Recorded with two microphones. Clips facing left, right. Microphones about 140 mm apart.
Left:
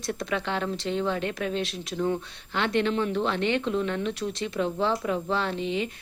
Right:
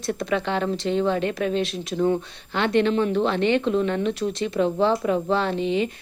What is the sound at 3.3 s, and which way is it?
Speech, centre (ahead or behind).